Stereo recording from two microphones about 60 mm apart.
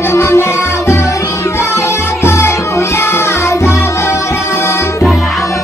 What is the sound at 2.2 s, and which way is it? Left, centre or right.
Music, left.